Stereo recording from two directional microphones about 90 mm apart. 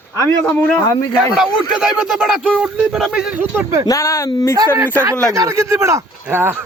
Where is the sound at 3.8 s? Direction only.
35° left (ahead or behind).